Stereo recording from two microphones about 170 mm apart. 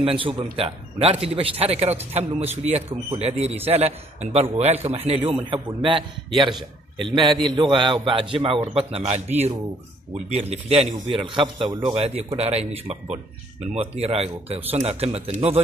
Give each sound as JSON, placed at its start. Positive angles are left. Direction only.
{"t": 0.0, "sound": "a man's voice", "side_deg": -30}
{"t": 11.1, "sound": "a man's voice", "side_deg": -30}
{"t": 11.9, "sound": "a man's voice", "side_deg": -35}